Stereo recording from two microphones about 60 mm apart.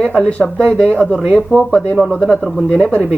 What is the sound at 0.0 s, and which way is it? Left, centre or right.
Speech, centre.